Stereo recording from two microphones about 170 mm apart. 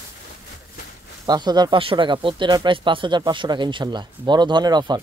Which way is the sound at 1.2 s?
25° right (ahead or behind).